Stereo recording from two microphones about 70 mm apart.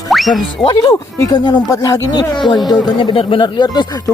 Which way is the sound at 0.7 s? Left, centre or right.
Left.